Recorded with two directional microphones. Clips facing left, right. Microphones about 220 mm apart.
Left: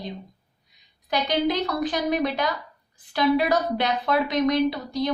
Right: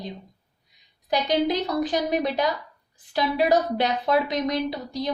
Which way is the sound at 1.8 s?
40° right (ahead or behind).